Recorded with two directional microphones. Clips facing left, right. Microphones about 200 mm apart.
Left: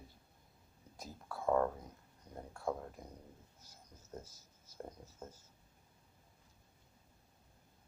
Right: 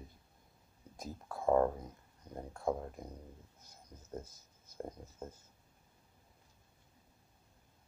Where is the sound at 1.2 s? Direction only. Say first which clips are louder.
Right 3 dB; 20° right (ahead or behind).